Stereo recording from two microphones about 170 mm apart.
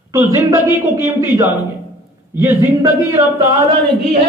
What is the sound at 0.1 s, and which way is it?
A man's voice, 15° right (ahead or behind).